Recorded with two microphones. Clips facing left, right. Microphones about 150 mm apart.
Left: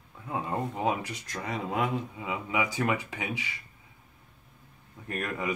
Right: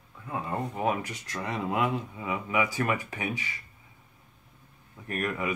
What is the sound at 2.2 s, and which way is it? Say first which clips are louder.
Speech: right 3 dB; 20° left (ahead or behind).